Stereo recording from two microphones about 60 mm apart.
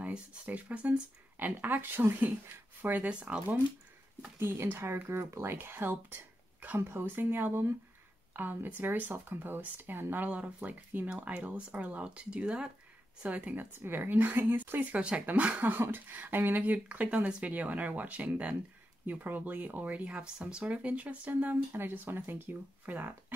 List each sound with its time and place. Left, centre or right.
0.0 s speech: right
4.4 s speech: right
6.9 s speech: right
13.7 s speech: right
15.0 s speech: centre
15.7 s speech: right
21.7 s speech: right